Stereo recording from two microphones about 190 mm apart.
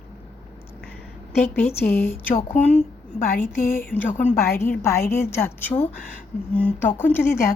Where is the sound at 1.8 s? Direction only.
10° left (ahead or behind).